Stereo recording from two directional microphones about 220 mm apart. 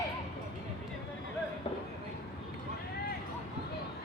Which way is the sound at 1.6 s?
25° left (ahead or behind).